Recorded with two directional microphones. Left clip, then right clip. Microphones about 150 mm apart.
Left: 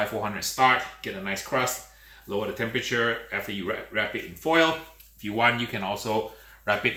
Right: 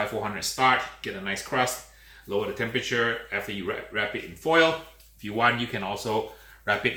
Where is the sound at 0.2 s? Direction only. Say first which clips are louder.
Left 3 dB; 20° left (ahead or behind).